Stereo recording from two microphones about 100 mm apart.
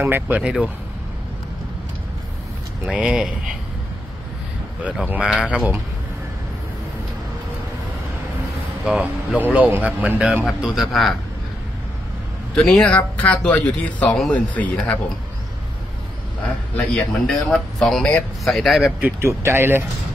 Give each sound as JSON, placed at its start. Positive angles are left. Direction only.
{"t": 0.1, "sound": "speech", "side_deg": -15}
{"t": 2.8, "sound": "speech", "side_deg": -10}
{"t": 4.8, "sound": "speech", "side_deg": -15}
{"t": 8.8, "sound": "speech", "side_deg": -10}
{"t": 10.2, "sound": "speech", "side_deg": -5}
{"t": 12.5, "sound": "a man's voice", "side_deg": 5}
{"t": 14.1, "sound": "speech", "side_deg": 5}
{"t": 14.5, "sound": "a man's voice", "side_deg": 15}
{"t": 16.7, "sound": "speech", "side_deg": 5}
{"t": 18.9, "sound": "speech", "side_deg": -15}